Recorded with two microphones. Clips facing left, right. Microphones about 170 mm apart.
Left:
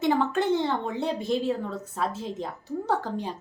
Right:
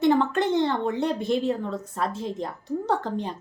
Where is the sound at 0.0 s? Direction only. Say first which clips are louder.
Right 3 dB; 5° left (ahead or behind).